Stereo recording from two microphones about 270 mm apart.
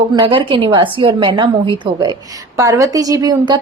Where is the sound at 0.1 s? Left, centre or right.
Centre.